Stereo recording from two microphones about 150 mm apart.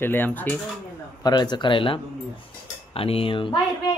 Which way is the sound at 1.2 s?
30° left (ahead or behind).